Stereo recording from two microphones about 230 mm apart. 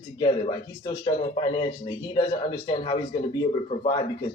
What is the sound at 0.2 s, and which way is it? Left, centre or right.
A man's voice, centre.